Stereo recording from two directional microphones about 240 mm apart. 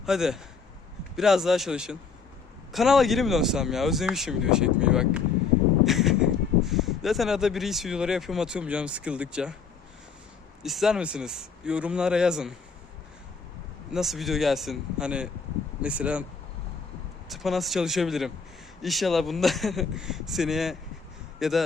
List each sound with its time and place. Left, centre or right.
0.0 s speech: centre
10.6 s speech: centre
13.9 s speech: centre
17.2 s a man's voice: centre